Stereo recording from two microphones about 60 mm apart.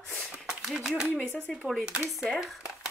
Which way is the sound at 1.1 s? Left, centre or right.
Left.